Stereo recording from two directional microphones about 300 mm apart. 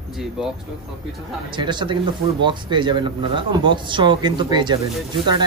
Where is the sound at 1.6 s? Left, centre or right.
Centre.